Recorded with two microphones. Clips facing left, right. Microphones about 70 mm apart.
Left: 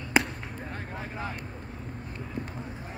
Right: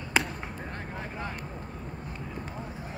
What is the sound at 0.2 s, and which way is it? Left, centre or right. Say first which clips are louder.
Basketball bounce: left 2 dB; left.